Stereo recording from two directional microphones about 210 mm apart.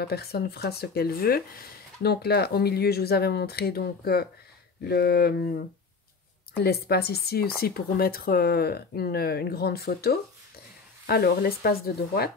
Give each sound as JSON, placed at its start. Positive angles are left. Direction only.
{"t": 0.0, "sound": "speech", "side_deg": 50}